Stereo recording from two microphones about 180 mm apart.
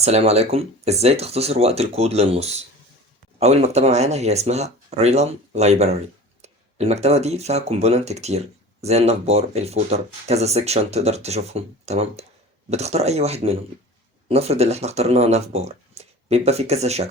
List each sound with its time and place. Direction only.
0.0 s speech: 35° right (ahead or behind)